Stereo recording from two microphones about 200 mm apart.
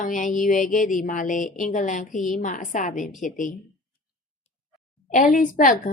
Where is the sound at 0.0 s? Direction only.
40° left (ahead or behind).